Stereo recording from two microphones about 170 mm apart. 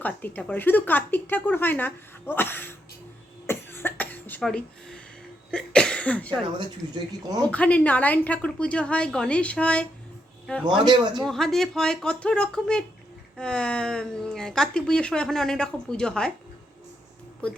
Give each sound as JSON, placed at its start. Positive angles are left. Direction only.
{"t": 0.0, "sound": "speech", "side_deg": 10}
{"t": 3.4, "sound": "cough", "side_deg": 15}
{"t": 5.5, "sound": "speech", "side_deg": 5}
{"t": 7.5, "sound": "speech", "side_deg": 10}
{"t": 10.8, "sound": "speech", "side_deg": -25}
{"t": 11.2, "sound": "speech", "side_deg": 0}